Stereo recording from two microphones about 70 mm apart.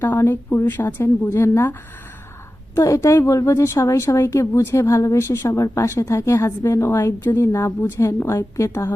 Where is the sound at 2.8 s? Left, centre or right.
Left.